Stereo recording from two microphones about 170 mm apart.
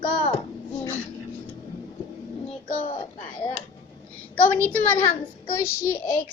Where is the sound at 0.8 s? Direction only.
10° left (ahead or behind).